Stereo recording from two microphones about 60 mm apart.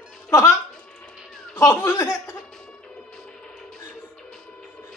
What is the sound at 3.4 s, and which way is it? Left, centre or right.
Music, centre.